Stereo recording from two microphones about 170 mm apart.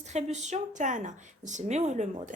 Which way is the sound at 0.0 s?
40° right (ahead or behind).